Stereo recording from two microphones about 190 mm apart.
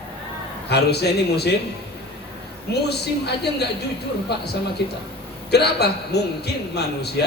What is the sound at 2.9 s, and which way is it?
Speech, 60° left (ahead or behind).